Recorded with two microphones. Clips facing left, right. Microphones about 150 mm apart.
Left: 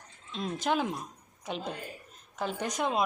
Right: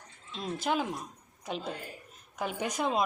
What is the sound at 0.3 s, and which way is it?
Speech, centre (ahead or behind).